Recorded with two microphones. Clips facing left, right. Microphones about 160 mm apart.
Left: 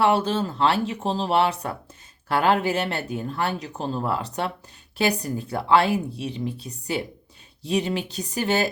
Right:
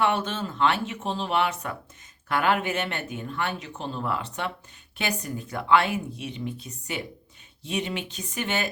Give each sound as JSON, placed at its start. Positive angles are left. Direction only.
{"t": 0.0, "sound": "speech", "side_deg": 35}